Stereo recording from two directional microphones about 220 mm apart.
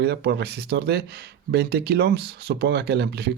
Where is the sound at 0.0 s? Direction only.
45° right (ahead or behind).